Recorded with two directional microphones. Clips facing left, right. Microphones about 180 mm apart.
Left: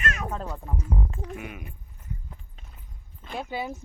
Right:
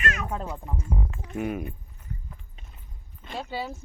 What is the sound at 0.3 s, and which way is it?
Speech, 10° right (ahead or behind).